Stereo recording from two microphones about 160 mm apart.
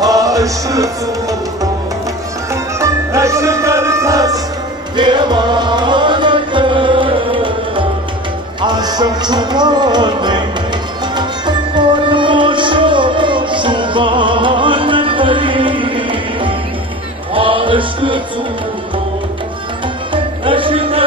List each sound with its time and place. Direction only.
0.0 s music: 20° right (ahead or behind)
2.5 s music: 20° right (ahead or behind)
20.1 s music: 30° right (ahead or behind)